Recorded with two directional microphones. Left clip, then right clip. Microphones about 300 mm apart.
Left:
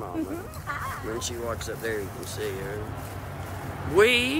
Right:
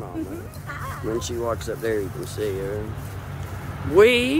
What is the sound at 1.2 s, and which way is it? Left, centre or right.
Speech, centre.